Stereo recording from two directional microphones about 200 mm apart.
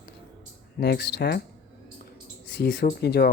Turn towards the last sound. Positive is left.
turn(degrees=55)  # may be behind; listen again after turning